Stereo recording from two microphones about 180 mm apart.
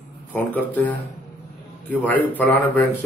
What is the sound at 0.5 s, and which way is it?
Speech, 10° left (ahead or behind).